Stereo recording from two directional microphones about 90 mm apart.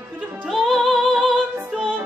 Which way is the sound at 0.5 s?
Centre (ahead or behind).